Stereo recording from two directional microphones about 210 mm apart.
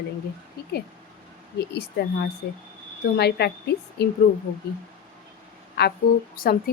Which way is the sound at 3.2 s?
50° left (ahead or behind).